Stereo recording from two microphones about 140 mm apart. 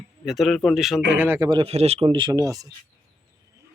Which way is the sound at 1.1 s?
15° right (ahead or behind).